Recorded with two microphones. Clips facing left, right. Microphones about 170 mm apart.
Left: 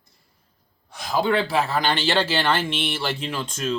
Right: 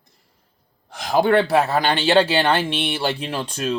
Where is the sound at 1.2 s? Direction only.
55° right (ahead or behind).